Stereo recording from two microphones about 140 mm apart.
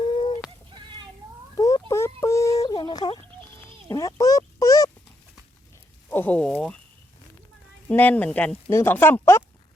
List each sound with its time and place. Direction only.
0.0 s goat: 35° left (ahead or behind)
1.5 s a sound: 25° left (ahead or behind)
6.1 s speech: 10° left (ahead or behind)
7.9 s speech: 10° left (ahead or behind)